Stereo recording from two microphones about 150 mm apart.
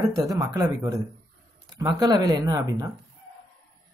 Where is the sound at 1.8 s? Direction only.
25° right (ahead or behind).